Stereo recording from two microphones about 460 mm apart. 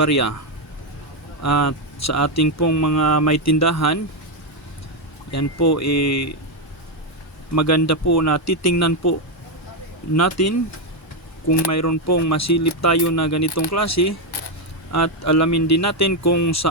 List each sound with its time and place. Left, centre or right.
0.0 s speech: left
1.4 s speech: left
5.3 s speech: left
7.5 s speech: left
10.2 s speech: left
11.7 s speech: left